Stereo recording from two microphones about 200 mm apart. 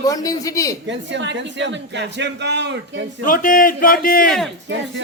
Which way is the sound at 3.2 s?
45° left (ahead or behind).